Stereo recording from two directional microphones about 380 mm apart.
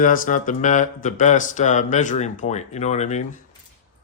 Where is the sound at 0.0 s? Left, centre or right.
Left.